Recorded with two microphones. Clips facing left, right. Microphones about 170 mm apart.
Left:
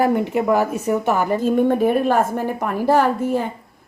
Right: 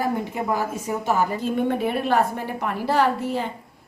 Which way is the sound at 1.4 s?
45° left (ahead or behind).